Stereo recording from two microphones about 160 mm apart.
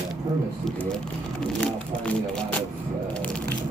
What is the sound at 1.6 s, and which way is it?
Speech, 5° left (ahead or behind).